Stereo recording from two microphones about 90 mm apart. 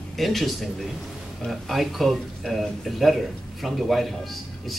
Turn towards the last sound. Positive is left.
turn(degrees=0)  # may be behind; listen again after turning